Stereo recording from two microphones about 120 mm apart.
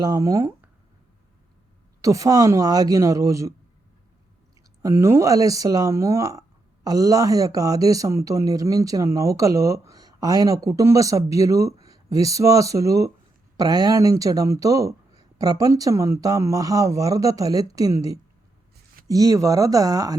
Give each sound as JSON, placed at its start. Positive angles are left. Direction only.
{"t": 0.0, "sound": "a man's voice", "side_deg": -30}
{"t": 2.0, "sound": "a man's voice", "side_deg": -25}
{"t": 4.8, "sound": "a man's voice", "side_deg": -25}